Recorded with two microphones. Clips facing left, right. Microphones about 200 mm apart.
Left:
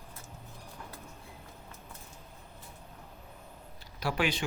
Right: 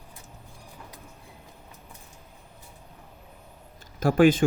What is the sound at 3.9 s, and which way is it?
Speech, 50° right (ahead or behind).